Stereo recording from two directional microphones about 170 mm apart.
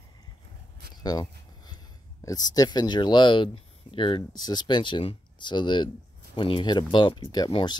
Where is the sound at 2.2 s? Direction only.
20° left (ahead or behind).